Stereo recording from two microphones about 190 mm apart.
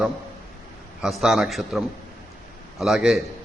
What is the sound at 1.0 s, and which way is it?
A man's voice, centre (ahead or behind).